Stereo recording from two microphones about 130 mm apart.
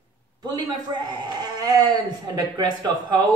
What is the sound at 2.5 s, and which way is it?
Speech, 35° right (ahead or behind).